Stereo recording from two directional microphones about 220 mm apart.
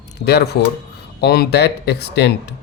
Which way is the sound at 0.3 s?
50° left (ahead or behind).